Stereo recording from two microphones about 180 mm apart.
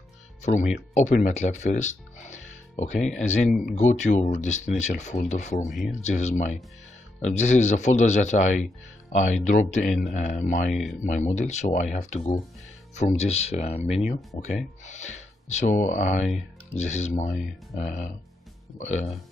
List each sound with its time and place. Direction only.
0.4 s speech: 40° left (ahead or behind)
10.7 s speech: centre (ahead or behind)
11.1 s speech: 40° left (ahead or behind)